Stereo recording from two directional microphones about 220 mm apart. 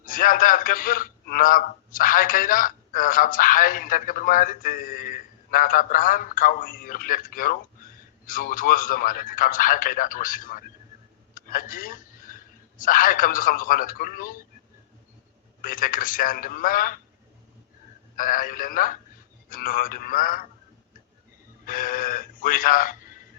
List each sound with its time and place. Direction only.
0.0 s a man's voice: 40° left (ahead or behind)
15.6 s a man's voice: 40° left (ahead or behind)
18.2 s a man's voice: 40° left (ahead or behind)
21.7 s a man's voice: 40° left (ahead or behind)